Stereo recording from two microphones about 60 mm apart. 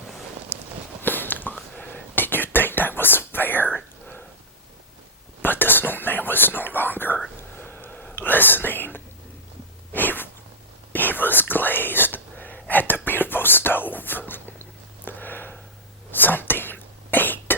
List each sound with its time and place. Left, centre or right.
1.0 s a sound: left
1.7 s whispering: left
2.1 s whispering: left
5.4 s whispering: left
7.3 s a sound: left
8.0 s whispering: left
9.9 s sneeze: left
10.9 s whispering: left
15.0 s a sound: left